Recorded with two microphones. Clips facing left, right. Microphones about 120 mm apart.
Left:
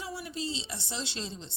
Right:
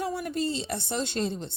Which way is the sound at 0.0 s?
55° right (ahead or behind).